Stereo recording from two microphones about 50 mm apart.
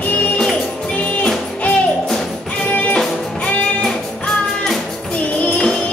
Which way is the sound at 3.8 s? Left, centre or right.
Centre.